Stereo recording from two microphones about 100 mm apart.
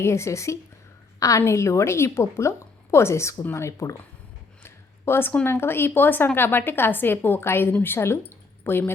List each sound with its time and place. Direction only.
0.0 s a woman's voice: 30° left (ahead or behind)
4.6 s a sound: 25° left (ahead or behind)
5.3 s a woman's voice: 20° left (ahead or behind)